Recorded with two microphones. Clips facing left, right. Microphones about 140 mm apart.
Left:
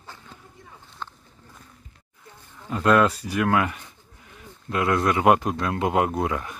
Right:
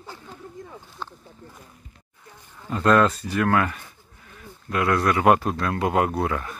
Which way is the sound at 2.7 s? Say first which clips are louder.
Right 1 dB; 10° left (ahead or behind).